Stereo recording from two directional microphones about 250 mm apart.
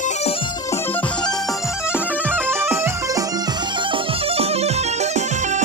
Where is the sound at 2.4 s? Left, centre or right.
Centre.